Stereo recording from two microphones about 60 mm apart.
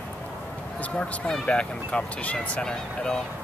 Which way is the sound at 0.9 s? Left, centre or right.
Centre.